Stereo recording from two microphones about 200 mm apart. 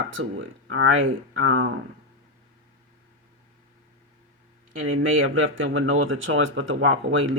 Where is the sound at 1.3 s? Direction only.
90° right.